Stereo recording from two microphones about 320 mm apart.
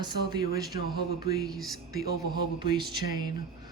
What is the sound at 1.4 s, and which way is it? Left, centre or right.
Speech, centre.